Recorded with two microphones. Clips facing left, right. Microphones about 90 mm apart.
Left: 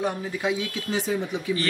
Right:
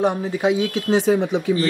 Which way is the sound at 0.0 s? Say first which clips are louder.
Right 7 dB; 20° right (ahead or behind).